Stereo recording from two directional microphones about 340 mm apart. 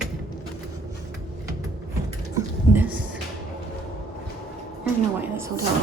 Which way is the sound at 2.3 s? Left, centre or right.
Centre.